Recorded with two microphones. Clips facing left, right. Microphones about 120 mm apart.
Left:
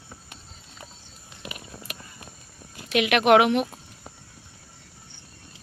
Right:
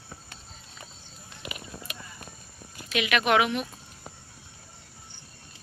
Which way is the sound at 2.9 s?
60° left (ahead or behind).